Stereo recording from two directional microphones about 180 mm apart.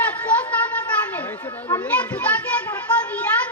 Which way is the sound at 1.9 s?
10° left (ahead or behind).